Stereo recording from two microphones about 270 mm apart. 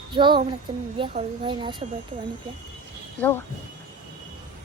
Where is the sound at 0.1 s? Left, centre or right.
Centre.